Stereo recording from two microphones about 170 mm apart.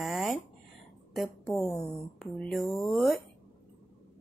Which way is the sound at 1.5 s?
15° left (ahead or behind).